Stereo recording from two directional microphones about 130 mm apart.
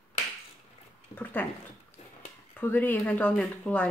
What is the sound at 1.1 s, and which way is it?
Speech, 15° left (ahead or behind).